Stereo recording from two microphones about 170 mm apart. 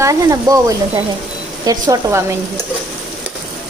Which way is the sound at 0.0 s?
20° right (ahead or behind).